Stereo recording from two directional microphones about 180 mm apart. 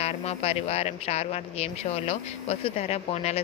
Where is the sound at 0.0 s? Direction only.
35° left (ahead or behind).